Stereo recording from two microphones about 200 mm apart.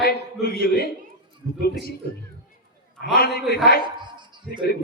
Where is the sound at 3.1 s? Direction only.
50° left (ahead or behind).